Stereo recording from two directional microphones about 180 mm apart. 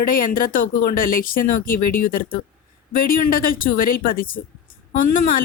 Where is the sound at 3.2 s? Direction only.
50° left (ahead or behind).